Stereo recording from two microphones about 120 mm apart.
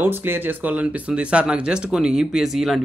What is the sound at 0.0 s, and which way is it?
Speech, 15° right (ahead or behind).